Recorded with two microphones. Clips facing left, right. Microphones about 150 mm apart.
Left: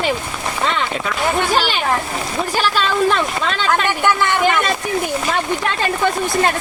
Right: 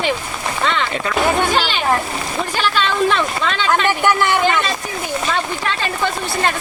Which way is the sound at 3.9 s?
15° right (ahead or behind).